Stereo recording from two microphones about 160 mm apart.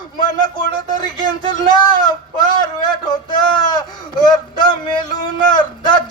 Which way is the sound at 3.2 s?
30° left (ahead or behind).